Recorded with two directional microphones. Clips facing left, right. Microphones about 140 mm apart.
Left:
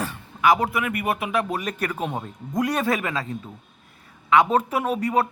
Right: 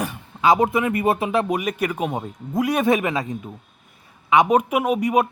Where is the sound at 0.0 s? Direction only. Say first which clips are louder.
Right 1 dB; 20° right (ahead or behind).